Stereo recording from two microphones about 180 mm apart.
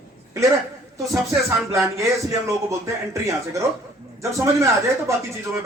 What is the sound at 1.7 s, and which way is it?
Speech, 15° right (ahead or behind).